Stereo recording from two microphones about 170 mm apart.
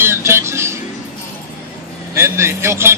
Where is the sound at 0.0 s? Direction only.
15° right (ahead or behind).